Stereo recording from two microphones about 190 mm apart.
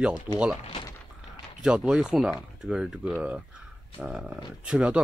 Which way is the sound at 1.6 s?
5° right (ahead or behind).